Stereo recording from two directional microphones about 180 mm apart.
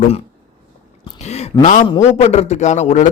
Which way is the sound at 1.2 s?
35° left (ahead or behind).